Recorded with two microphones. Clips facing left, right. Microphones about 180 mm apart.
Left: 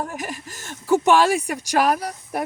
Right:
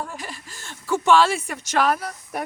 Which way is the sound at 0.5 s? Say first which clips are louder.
Left 6 dB; 15° left (ahead or behind).